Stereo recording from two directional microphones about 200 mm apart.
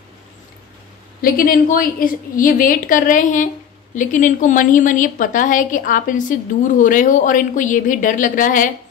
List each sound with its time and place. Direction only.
1.2 s a woman's voice: 45° left (ahead or behind)